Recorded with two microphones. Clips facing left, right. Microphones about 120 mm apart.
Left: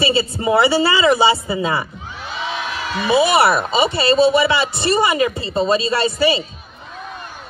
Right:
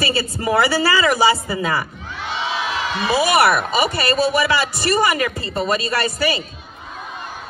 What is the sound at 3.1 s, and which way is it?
Speech, 25° left (ahead or behind).